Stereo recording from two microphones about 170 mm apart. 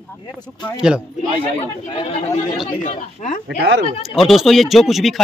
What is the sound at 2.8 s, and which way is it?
Speech, 50° left (ahead or behind).